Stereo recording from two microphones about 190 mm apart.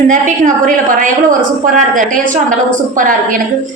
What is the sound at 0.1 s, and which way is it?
A woman's voice, 40° right (ahead or behind).